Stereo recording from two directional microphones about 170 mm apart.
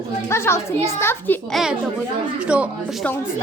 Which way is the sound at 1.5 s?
5° right (ahead or behind).